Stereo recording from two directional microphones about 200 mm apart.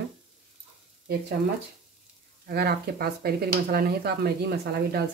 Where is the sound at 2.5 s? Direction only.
50° right (ahead or behind).